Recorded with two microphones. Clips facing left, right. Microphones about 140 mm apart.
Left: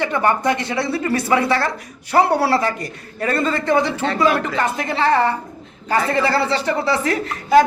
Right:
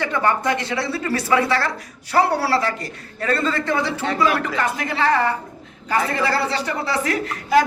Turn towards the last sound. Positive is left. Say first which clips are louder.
# left 4 dB
turn(degrees=25)  # may be behind; listen again after turning